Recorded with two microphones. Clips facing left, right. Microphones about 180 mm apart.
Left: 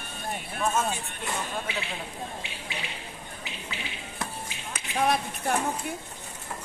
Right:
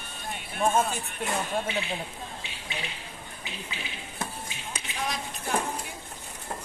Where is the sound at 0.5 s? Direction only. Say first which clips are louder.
Right 3 dB; 30° right (ahead or behind).